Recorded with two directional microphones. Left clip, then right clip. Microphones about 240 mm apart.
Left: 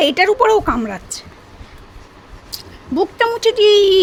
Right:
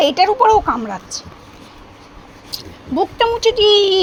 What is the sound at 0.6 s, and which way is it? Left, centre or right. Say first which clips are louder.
Speech: even; left.